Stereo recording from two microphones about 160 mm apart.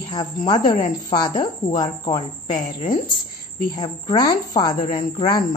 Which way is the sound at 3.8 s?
25° left (ahead or behind).